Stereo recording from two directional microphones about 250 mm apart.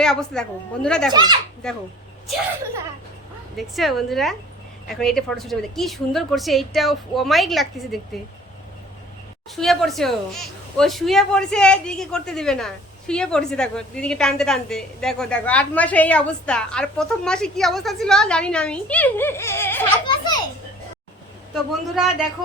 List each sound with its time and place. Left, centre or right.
0.0 s a woman's voice: centre
1.1 s a child's voice: centre
1.6 s a woman's voice: centre
3.6 s a woman's voice: centre
9.6 s a woman's voice: centre
21.5 s a woman's voice: centre